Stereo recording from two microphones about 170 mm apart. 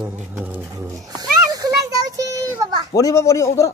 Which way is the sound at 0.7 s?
20° right (ahead or behind).